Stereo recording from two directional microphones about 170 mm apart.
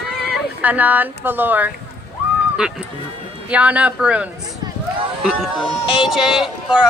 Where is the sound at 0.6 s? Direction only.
10° right (ahead or behind).